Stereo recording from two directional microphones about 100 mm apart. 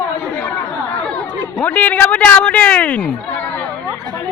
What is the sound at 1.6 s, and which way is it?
Speech, 15° left (ahead or behind).